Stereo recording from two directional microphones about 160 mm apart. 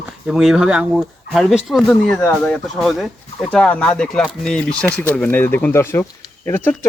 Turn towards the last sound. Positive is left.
turn(degrees=15)  # may be behind; listen again after turning